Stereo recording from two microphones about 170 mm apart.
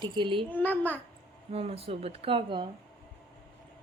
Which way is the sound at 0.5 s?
10° left (ahead or behind).